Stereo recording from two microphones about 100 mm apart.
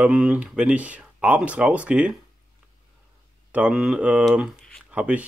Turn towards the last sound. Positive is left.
turn(degrees=-10)  # may be behind; listen again after turning